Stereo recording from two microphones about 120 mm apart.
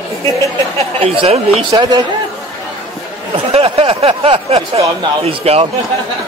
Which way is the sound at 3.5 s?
50° right (ahead or behind).